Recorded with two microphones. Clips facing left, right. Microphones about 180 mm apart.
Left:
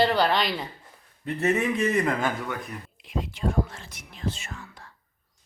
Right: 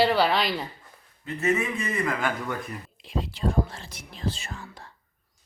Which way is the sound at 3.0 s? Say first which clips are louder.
Right 1 dB; 30° right (ahead or behind).